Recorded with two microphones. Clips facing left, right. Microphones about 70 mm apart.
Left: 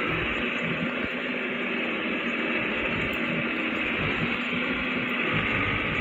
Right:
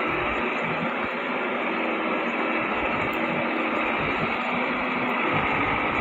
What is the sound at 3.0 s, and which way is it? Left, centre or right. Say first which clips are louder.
Vehicle: right 3 dB; right.